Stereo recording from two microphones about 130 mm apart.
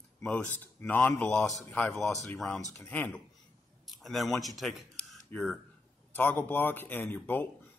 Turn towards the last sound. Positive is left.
turn(degrees=15)  # may be behind; listen again after turning